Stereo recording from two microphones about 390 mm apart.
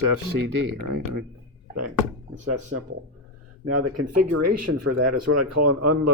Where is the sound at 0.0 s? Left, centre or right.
Right.